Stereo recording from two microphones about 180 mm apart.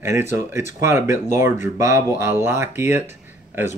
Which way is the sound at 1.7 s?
15° right (ahead or behind).